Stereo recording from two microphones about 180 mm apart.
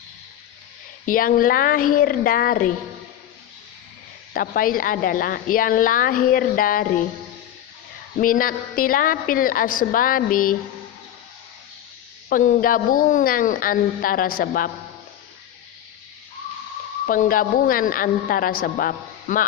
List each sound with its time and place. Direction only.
1.0 s a woman's voice: 50° left (ahead or behind)
4.4 s a woman's voice: 50° left (ahead or behind)
8.1 s a woman's voice: 50° left (ahead or behind)
12.3 s a woman's voice: 45° left (ahead or behind)
17.1 s a woman's voice: 50° left (ahead or behind)